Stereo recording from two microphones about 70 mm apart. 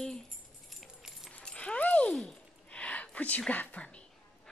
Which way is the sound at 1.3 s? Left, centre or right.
Centre.